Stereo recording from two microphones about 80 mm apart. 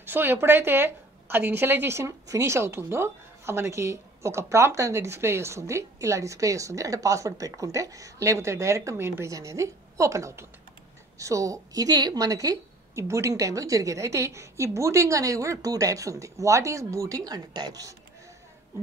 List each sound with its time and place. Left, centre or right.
0.0 s a woman's voice: right